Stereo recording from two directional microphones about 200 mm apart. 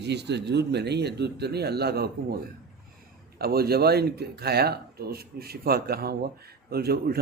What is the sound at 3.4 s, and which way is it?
Speech, 50° right (ahead or behind).